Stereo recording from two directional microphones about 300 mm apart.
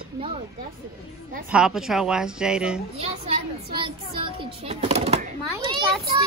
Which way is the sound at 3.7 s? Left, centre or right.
Centre.